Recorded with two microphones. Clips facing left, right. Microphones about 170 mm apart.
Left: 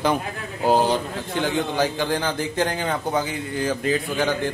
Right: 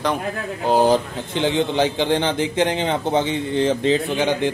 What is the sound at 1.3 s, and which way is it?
A man's voice, 20° right (ahead or behind).